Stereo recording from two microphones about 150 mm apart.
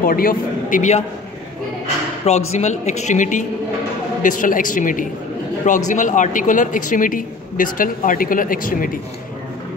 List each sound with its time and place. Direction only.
0.0 s a man's voice: 75° left (ahead or behind); by 1.0 s 55° left (ahead or behind)
2.2 s a man's voice: 45° left (ahead or behind); by 8.9 s 70° left (ahead or behind)